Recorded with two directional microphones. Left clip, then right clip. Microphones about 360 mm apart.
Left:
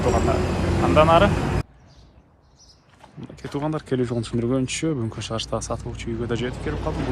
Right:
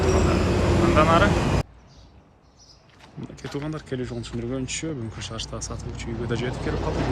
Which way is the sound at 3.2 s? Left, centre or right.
Centre.